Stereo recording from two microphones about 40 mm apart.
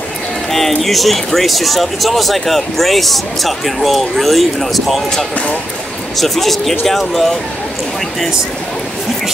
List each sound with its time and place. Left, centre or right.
0.5 s speech: centre
6.1 s speech: centre